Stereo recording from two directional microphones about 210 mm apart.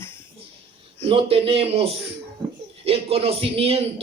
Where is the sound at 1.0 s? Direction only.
25° right (ahead or behind).